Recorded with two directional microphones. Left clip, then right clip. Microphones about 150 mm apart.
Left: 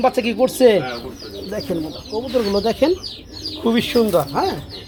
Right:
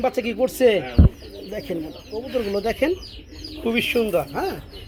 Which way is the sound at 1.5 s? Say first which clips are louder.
Left 4 dB; centre (ahead or behind).